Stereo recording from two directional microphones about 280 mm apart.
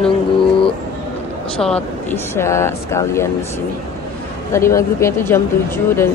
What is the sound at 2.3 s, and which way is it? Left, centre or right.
Speech, centre.